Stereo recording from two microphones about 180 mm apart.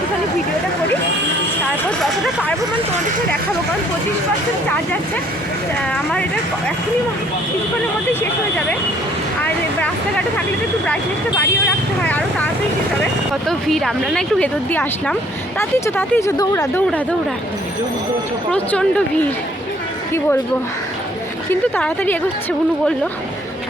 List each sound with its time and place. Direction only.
9.4 s speech: 5° left (ahead or behind)
12.0 s speech: 10° left (ahead or behind)
13.5 s speech: centre (ahead or behind); by 16.8 s 15° left (ahead or behind)
18.5 s speech: 5° left (ahead or behind)
21.5 s speech: 10° left (ahead or behind)